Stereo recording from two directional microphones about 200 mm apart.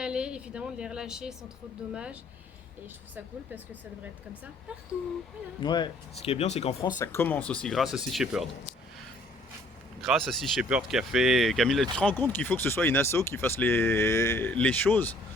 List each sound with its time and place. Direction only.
0.0 s speech: 5° right (ahead or behind)
5.5 s speech: 25° left (ahead or behind)
7.0 s speech: 10° left (ahead or behind)
10.0 s speech: centre (ahead or behind)